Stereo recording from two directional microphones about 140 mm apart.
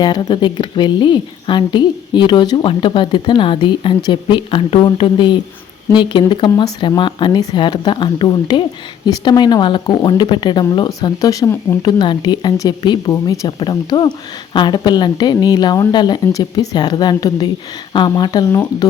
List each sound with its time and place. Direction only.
0.0 s a woman's voice: 30° left (ahead or behind)
11.8 s a woman's voice: 30° left (ahead or behind)